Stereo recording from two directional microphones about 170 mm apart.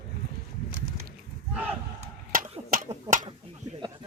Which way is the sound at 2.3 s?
55° right (ahead or behind).